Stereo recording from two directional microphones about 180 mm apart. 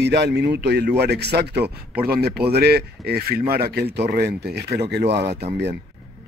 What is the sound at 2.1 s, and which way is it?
Speech, 60° right (ahead or behind).